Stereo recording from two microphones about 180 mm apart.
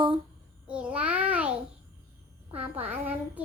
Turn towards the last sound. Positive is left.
turn(degrees=-10)  # may be behind; listen again after turning